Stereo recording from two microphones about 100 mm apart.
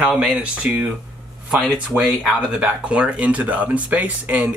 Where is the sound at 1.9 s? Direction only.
25° right (ahead or behind).